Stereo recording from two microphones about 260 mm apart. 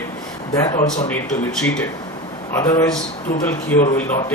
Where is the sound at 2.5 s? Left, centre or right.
Centre.